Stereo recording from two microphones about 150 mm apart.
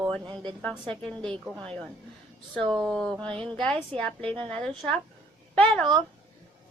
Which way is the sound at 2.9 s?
Centre (ahead or behind).